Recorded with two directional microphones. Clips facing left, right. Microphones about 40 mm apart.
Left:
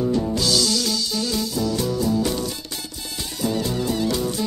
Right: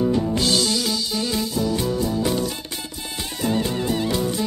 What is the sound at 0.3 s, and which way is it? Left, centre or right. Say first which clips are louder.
Music: right 1 dB; right.